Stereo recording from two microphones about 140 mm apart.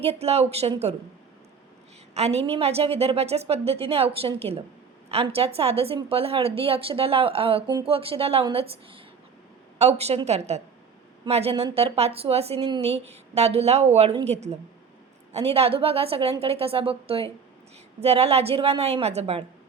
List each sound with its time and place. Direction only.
0.0 s a woman's voice: 45° right (ahead or behind)
2.1 s a woman's voice: 50° right (ahead or behind)
12.5 s speech: 30° right (ahead or behind)
12.8 s a woman's voice: 50° right (ahead or behind)